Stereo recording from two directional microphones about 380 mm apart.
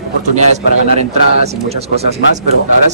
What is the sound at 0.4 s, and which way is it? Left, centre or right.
A man's voice, centre.